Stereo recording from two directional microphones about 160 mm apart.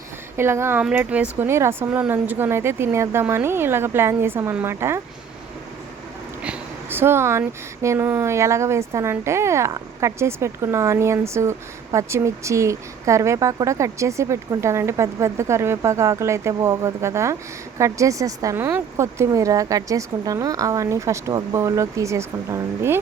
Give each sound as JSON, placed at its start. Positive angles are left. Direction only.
{"t": 0.3, "sound": "speech", "side_deg": -15}
{"t": 6.4, "sound": "speech", "side_deg": -10}